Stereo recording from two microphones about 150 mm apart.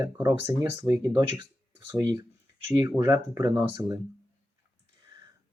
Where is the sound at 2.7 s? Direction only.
20° right (ahead or behind).